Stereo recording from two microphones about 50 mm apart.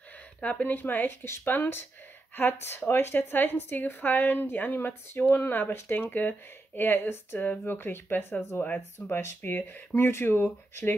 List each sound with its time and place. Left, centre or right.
0.4 s speech: left
0.7 s speech: left
1.2 s speech: left
1.5 s speech: left
7.3 s speech: left